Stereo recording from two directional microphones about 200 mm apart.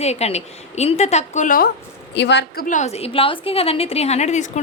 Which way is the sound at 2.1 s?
60° left (ahead or behind).